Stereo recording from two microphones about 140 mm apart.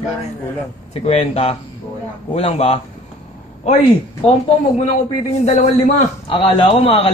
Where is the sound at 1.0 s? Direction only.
45° left (ahead or behind).